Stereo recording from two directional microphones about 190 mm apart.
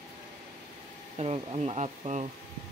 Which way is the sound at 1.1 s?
35° right (ahead or behind).